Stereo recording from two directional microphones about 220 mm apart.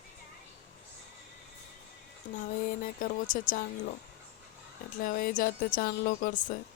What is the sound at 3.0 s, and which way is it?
Speech, 40° left (ahead or behind).